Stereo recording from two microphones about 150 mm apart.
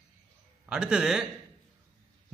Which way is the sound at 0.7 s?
5° right (ahead or behind).